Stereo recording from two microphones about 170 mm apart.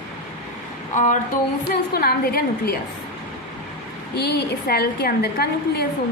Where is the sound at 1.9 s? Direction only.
60° left (ahead or behind).